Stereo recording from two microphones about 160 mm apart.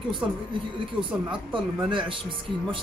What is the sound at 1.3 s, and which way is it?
Speech, 30° right (ahead or behind).